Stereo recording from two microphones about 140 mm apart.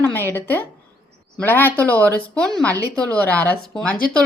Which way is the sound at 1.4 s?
15° left (ahead or behind).